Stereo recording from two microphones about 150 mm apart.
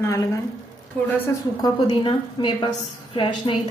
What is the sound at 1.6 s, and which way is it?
A woman's voice, 30° left (ahead or behind).